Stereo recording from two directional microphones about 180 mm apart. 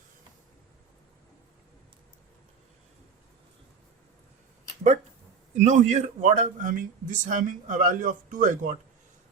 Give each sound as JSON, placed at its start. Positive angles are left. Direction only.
{"t": 5.5, "sound": "a man's voice", "side_deg": -40}